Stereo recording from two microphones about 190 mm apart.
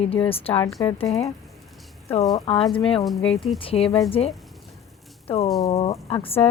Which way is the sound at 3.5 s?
30° left (ahead or behind).